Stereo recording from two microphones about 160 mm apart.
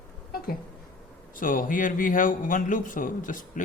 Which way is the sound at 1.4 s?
60° left (ahead or behind).